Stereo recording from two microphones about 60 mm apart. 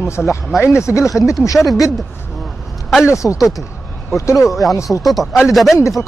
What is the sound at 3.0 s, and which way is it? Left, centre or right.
Speech, left.